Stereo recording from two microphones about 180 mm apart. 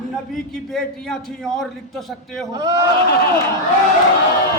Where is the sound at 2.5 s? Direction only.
20° right (ahead or behind).